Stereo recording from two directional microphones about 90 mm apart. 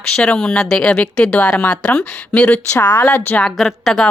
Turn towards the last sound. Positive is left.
turn(degrees=0)  # may be behind; listen again after turning